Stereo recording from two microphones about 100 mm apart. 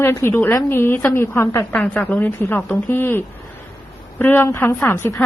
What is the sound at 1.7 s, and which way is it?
A woman's voice, 15° left (ahead or behind).